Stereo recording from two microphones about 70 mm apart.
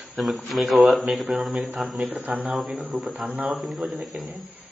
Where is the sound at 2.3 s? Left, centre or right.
Right.